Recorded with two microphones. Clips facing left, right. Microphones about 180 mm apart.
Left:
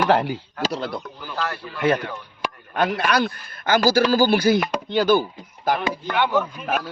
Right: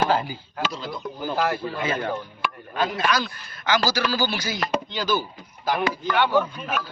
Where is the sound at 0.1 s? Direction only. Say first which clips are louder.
Left 5 dB; 70° left (ahead or behind).